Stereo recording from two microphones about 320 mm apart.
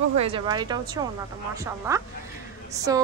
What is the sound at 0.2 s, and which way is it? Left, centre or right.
A woman's voice, centre.